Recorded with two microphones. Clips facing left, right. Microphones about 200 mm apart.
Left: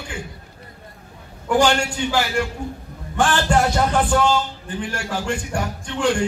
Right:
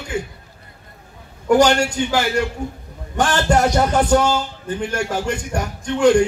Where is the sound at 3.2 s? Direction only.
40° right (ahead or behind).